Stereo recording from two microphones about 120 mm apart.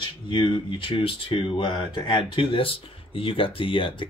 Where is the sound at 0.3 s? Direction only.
40° left (ahead or behind).